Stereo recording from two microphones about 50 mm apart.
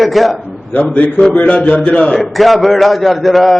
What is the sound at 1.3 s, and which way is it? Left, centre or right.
Speech, left.